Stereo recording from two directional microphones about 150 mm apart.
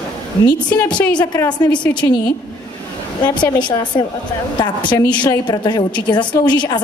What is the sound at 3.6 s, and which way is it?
A woman's voice, 30° left (ahead or behind).